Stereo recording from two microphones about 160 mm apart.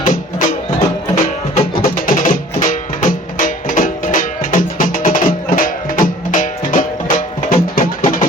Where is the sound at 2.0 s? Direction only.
60° left (ahead or behind).